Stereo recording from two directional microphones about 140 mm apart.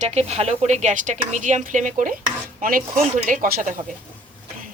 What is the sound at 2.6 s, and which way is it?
Speech, 85° right.